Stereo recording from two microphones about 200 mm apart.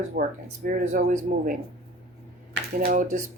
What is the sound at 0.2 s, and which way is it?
Speech, 45° right (ahead or behind).